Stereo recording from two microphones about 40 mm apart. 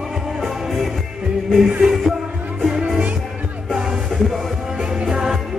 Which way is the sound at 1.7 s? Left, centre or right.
Centre.